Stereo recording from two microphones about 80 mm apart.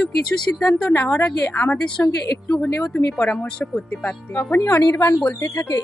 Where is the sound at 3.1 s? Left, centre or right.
Centre.